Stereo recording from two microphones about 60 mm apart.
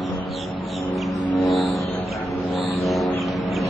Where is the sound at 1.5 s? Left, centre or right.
Centre.